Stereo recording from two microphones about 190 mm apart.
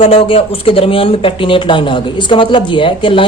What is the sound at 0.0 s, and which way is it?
Speech, 30° left (ahead or behind).